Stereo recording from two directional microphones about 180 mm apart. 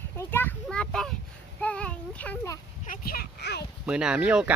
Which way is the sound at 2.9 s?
55° left (ahead or behind).